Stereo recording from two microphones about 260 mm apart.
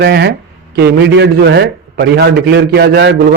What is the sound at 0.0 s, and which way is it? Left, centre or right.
A man's voice, right.